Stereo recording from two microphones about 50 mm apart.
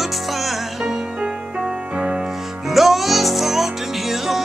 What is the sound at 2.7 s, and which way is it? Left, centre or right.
Music, centre.